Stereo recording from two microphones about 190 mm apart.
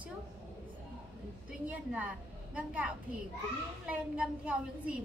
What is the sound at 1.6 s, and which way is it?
A woman's voice, 5° right (ahead or behind).